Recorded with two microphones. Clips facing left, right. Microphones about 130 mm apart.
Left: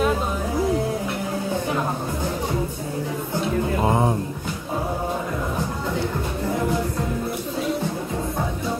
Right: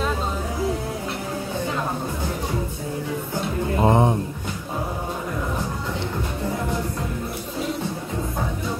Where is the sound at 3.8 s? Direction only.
20° right (ahead or behind).